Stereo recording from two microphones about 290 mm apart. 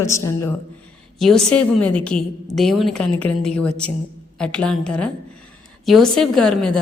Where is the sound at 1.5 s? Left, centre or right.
Left.